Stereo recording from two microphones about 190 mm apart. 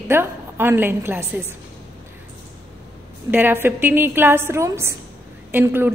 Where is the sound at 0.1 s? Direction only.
10° right (ahead or behind).